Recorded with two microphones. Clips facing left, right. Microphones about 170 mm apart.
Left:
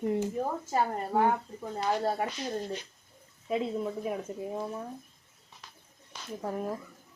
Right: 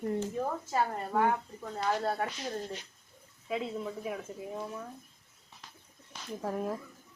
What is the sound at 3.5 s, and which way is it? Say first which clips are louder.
Speech: left 4 dB; 25° left (ahead or behind).